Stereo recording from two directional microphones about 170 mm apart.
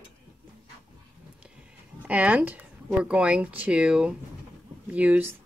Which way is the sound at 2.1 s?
10° right (ahead or behind).